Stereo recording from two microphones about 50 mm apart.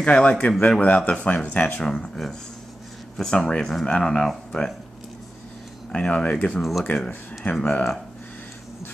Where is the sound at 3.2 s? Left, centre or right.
Centre.